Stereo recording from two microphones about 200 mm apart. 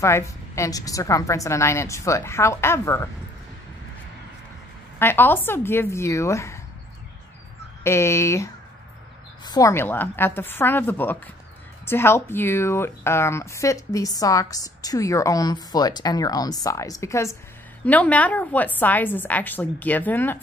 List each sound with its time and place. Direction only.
0.0 s speech: 15° left (ahead or behind)
4.9 s speech: 10° left (ahead or behind)
7.8 s speech: 15° left (ahead or behind)